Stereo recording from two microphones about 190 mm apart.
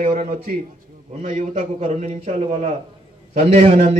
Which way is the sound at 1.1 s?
40° right (ahead or behind).